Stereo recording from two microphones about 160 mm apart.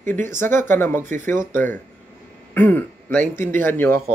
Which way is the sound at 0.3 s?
15° left (ahead or behind).